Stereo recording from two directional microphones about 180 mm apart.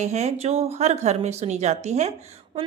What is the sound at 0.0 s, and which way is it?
A woman's voice, 40° right (ahead or behind).